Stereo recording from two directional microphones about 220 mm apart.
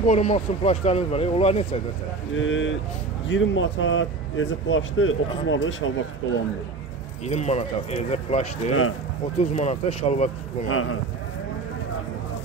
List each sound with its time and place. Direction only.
0.0 s speech: 30° left (ahead or behind)
2.3 s speech: 60° left (ahead or behind)
7.2 s speech: 30° left (ahead or behind)
10.7 s speech: 70° left (ahead or behind)